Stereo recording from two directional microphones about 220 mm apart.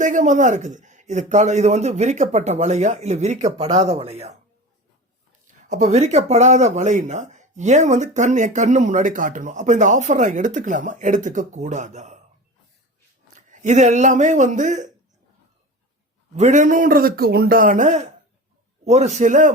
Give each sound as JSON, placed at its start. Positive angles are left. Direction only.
{"t": 0.0, "sound": "speech", "side_deg": -35}
{"t": 5.6, "sound": "speech", "side_deg": -35}
{"t": 13.5, "sound": "speech", "side_deg": -35}
{"t": 16.3, "sound": "speech", "side_deg": -35}